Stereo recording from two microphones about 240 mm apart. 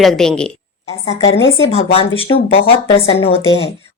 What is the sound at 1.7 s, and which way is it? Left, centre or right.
Speech, left.